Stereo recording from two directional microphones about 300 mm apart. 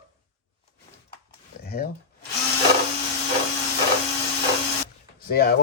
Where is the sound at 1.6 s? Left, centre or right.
Left.